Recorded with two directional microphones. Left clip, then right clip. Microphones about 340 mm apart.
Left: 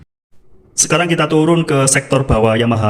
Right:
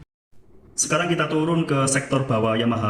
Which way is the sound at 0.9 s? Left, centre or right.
Left.